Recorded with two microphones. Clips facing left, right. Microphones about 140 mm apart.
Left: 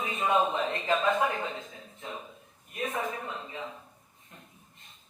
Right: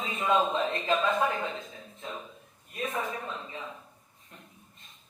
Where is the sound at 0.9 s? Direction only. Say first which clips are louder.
Left 1 dB; 25° left (ahead or behind).